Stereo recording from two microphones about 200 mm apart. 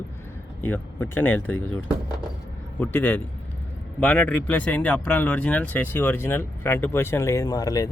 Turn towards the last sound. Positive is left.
turn(degrees=15)  # may be behind; listen again after turning